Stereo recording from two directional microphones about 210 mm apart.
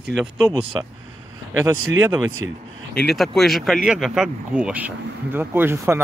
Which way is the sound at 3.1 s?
Centre (ahead or behind).